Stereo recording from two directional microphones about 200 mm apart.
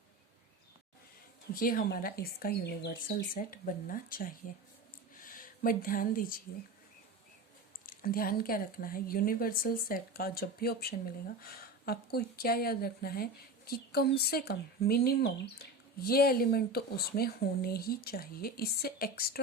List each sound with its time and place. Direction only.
1.5 s a woman's voice: 45° left (ahead or behind)
5.1 s a sound: 45° left (ahead or behind)
7.9 s a woman's voice: 45° left (ahead or behind)